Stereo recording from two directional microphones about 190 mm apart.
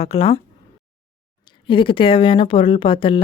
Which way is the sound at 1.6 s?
25° left (ahead or behind).